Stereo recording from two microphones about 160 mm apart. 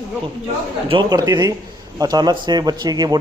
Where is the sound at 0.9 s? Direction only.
25° right (ahead or behind).